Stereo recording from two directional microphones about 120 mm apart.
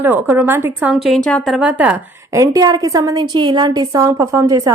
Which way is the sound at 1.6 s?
10° right (ahead or behind).